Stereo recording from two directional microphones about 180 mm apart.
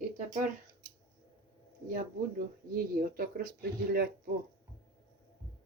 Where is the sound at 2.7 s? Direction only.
55° right (ahead or behind).